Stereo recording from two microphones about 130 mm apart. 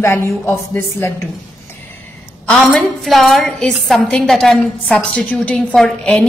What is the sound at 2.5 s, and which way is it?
A woman's voice, 5° left (ahead or behind).